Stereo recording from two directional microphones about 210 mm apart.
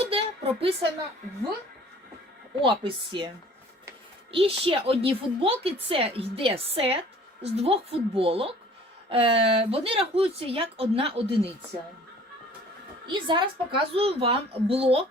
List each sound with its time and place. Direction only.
0.0 s a sound: 25° right (ahead or behind)
2.6 s speech: 25° right (ahead or behind)
13.1 s speech: 20° right (ahead or behind)